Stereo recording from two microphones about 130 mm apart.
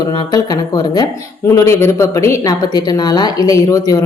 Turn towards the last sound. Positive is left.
turn(degrees=25)  # may be behind; listen again after turning